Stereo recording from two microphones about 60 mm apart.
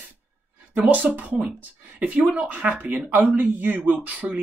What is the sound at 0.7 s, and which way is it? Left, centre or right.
Speech, right.